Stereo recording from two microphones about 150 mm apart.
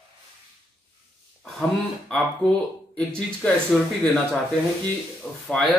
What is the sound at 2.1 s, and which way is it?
Speech, 5° left (ahead or behind).